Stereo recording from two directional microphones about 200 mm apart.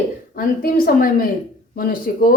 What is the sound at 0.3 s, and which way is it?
A woman's voice, 45° left (ahead or behind).